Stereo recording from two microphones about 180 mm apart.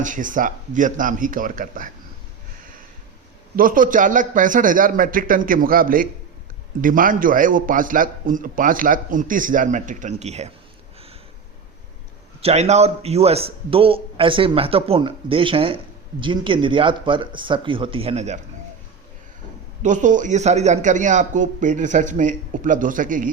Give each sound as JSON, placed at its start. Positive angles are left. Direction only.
{"t": 0.0, "sound": "a man's voice", "side_deg": -45}
{"t": 3.5, "sound": "a man's voice", "side_deg": -50}
{"t": 12.4, "sound": "speech", "side_deg": -35}
{"t": 19.8, "sound": "a man's voice", "side_deg": -45}